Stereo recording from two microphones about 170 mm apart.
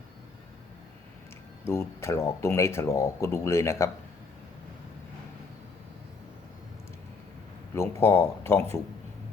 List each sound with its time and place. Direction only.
1.6 s speech: 15° left (ahead or behind)
7.8 s speech: 15° left (ahead or behind)